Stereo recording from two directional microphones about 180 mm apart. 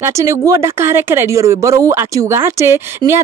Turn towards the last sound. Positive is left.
turn(degrees=-15)  # may be behind; listen again after turning